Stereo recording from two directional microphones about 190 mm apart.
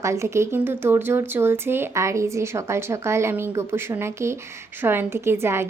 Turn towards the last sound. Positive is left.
turn(degrees=-15)  # may be behind; listen again after turning